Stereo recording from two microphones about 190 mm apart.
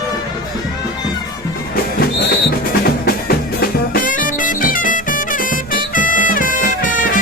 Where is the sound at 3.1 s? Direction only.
50° left (ahead or behind).